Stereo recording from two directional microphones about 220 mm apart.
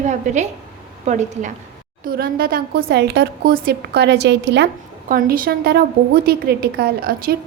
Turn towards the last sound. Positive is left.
turn(degrees=-45)  # may be behind; listen again after turning